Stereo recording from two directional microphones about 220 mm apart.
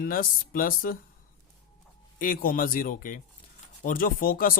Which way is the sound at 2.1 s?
40° left (ahead or behind).